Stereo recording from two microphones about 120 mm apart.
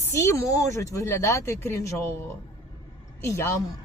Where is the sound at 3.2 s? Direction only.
25° left (ahead or behind).